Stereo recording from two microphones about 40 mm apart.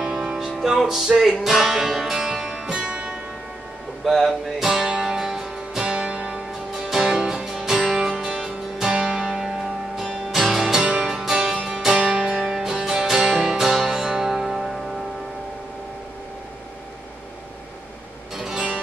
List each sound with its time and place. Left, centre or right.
0.0 s music: centre
1.4 s speech: centre
2.2 s music: centre
2.7 s music: right
4.0 s music: centre
5.9 s music: right
6.7 s music: centre
8.9 s music: right
9.2 s music: centre
18.3 s music: centre